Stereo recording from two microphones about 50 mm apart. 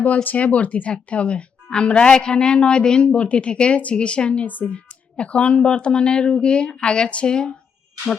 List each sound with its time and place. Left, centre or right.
0.0 s speech: left
4.4 s speech: left